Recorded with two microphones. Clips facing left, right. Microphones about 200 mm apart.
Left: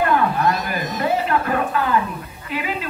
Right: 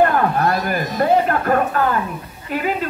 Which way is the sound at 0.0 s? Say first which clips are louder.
Right 2 dB; 45° right (ahead or behind).